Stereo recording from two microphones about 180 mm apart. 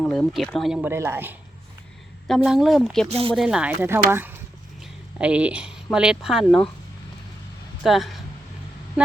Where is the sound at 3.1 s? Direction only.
30° right (ahead or behind).